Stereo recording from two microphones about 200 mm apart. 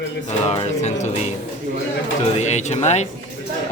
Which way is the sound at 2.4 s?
35° left (ahead or behind).